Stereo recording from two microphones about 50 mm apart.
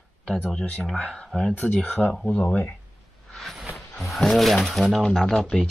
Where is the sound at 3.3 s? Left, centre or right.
Centre.